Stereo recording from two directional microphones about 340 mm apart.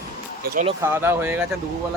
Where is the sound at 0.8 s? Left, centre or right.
Centre.